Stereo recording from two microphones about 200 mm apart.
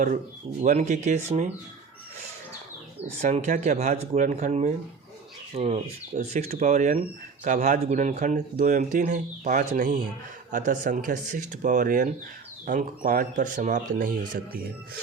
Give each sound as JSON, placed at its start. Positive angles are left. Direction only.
{"t": 0.6, "sound": "speech", "side_deg": -35}
{"t": 3.2, "sound": "speech", "side_deg": -35}